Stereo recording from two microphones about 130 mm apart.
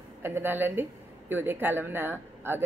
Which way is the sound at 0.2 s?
15° right (ahead or behind).